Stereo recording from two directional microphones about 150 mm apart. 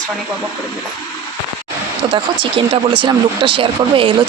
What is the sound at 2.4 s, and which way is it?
Speech, 35° right (ahead or behind).